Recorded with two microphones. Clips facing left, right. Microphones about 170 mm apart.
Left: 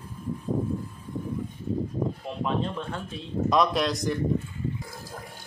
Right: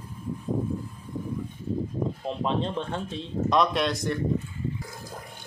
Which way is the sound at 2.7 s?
25° right (ahead or behind).